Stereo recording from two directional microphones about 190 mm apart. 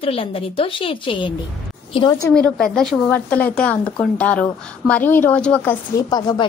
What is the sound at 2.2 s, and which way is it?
A woman's voice, 5° left (ahead or behind).